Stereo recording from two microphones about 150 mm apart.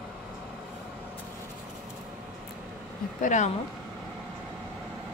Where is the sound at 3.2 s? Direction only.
55° left (ahead or behind).